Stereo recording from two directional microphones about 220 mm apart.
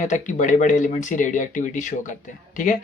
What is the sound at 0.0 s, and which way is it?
Speech, 35° left (ahead or behind).